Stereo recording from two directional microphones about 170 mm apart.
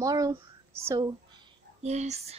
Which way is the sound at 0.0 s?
20° right (ahead or behind).